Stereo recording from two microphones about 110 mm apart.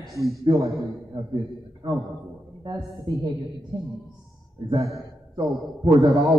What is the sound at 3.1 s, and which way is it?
Speech, 40° right (ahead or behind).